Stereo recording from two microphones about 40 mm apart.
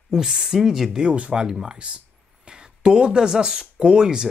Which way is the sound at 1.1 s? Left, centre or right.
Right.